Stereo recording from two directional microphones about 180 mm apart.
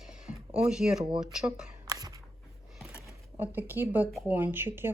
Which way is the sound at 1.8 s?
20° right (ahead or behind).